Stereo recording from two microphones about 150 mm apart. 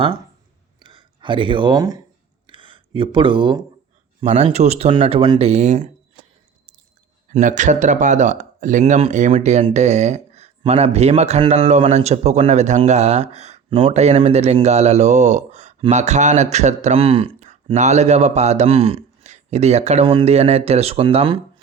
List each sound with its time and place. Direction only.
0.8 s a sound: 30° right (ahead or behind)
4.2 s speech: 40° right (ahead or behind)
5.4 s speech: 45° right (ahead or behind)
7.3 s speech: 55° right (ahead or behind); by 17.5 s 40° right (ahead or behind)
17.7 s a man's voice: 50° right (ahead or behind)